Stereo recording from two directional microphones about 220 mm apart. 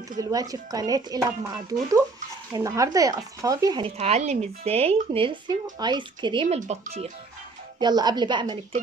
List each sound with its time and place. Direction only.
0.2 s speech: 15° right (ahead or behind)
7.8 s speech: 20° right (ahead or behind)